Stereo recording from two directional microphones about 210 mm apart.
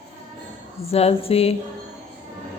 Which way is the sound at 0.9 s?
30° left (ahead or behind).